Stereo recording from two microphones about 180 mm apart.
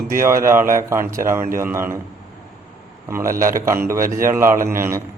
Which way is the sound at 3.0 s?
15° right (ahead or behind).